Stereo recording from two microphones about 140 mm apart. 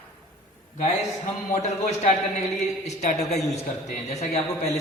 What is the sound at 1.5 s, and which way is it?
A man's voice, 50° left (ahead or behind).